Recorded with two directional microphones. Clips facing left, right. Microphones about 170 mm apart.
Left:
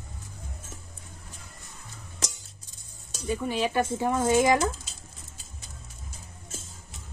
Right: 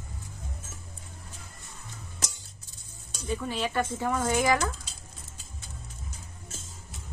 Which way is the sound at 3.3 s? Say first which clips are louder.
Left 3 dB; 15° left (ahead or behind).